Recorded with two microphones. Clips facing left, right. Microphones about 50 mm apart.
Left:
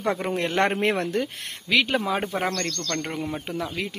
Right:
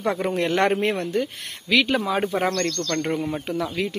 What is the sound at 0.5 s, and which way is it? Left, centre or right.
Speech, centre.